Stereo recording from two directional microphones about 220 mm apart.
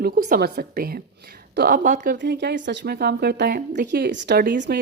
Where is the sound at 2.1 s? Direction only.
50° right (ahead or behind).